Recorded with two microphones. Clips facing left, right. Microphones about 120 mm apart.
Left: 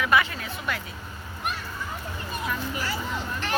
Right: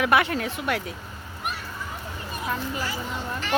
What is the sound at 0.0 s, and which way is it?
Speech, 65° right (ahead or behind).